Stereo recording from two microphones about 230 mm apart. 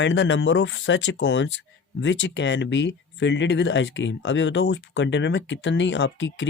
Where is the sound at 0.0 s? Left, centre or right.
Left.